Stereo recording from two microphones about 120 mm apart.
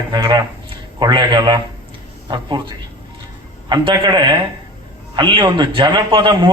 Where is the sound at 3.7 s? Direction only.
40° right (ahead or behind).